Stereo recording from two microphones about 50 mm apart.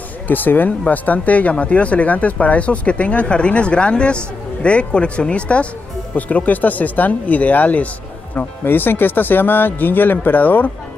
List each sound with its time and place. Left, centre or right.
0.3 s speech: left
8.6 s speech: left